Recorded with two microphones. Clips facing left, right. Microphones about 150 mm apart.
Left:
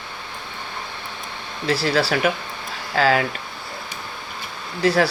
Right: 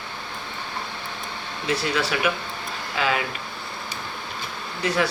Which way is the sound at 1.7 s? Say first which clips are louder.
Left 4 dB; 35° left (ahead or behind).